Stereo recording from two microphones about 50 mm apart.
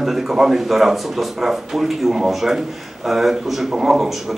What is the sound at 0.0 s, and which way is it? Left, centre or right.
Speech, centre.